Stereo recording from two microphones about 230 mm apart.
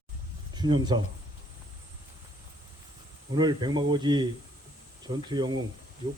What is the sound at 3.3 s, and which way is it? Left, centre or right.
Speech, centre.